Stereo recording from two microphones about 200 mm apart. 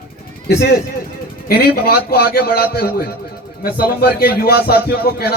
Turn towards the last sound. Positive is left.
turn(degrees=50)  # may be behind; listen again after turning